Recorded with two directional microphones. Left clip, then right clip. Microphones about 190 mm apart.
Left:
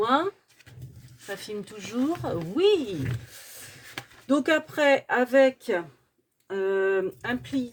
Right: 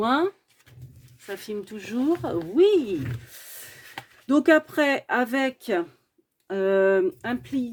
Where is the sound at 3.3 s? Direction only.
45° right (ahead or behind).